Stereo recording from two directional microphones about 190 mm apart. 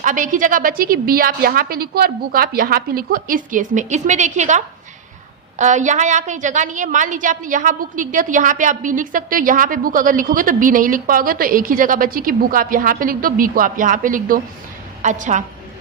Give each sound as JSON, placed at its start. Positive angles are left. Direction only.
{"t": 0.0, "sound": "a woman's voice", "side_deg": -45}